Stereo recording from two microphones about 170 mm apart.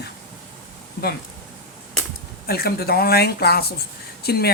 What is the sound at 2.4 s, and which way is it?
Speech, 65° left (ahead or behind).